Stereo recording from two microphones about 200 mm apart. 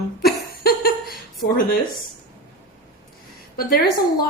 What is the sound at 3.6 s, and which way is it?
Speech, 50° left (ahead or behind).